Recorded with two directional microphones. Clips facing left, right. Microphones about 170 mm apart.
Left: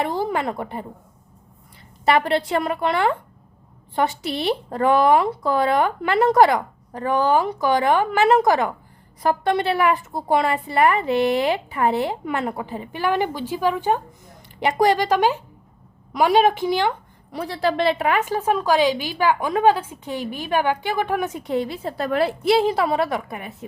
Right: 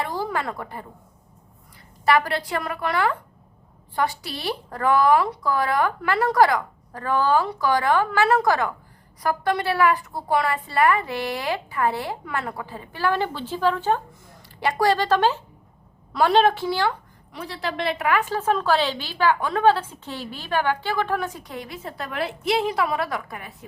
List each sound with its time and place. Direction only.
0.0 s a sound: 20° left (ahead or behind)
2.0 s a woman's voice: 25° left (ahead or behind)
17.3 s a woman's voice: 35° left (ahead or behind)